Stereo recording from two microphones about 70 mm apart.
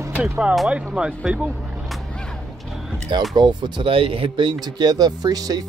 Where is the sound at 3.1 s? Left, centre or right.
Right.